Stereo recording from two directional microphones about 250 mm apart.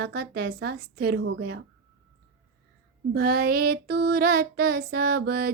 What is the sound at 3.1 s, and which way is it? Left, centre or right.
Child singing, right.